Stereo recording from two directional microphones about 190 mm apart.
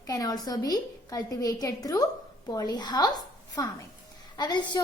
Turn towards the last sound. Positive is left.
turn(degrees=25)  # may be behind; listen again after turning